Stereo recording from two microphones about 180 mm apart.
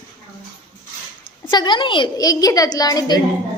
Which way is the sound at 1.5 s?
25° left (ahead or behind).